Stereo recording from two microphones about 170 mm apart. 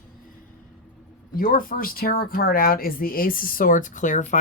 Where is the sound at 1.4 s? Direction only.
55° left (ahead or behind).